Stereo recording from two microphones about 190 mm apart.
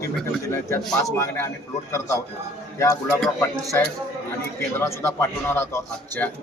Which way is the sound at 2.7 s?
15° left (ahead or behind).